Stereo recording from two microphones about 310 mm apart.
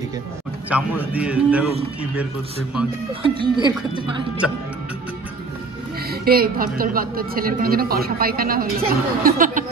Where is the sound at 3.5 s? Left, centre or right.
Centre.